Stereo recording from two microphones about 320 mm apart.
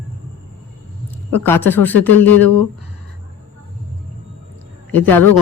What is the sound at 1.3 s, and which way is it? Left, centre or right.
Speech, centre.